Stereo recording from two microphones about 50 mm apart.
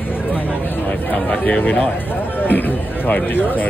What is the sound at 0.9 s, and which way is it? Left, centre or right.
Speech, left.